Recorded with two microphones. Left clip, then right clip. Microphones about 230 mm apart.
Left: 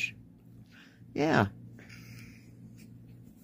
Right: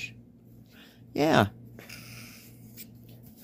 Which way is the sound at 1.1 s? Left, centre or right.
Centre.